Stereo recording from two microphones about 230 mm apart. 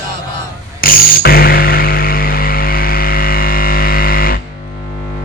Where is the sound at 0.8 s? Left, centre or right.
Left.